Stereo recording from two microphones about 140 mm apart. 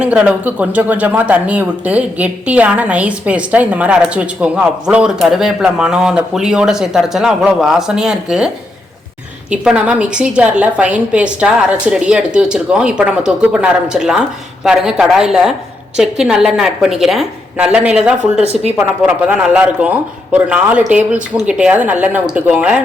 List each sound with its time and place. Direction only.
0.0 s a man's voice: 10° right (ahead or behind)
9.5 s a man's voice: 10° right (ahead or behind)
18.4 s speech: 45° right (ahead or behind)
19.0 s a man's voice: 10° right (ahead or behind)